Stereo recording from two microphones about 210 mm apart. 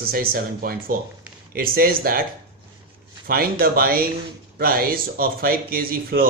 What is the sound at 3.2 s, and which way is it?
A man's voice, 45° right (ahead or behind).